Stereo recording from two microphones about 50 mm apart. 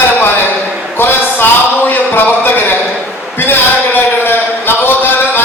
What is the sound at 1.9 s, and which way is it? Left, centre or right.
Music, left.